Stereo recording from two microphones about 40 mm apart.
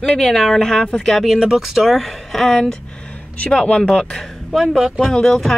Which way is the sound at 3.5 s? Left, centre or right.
Left.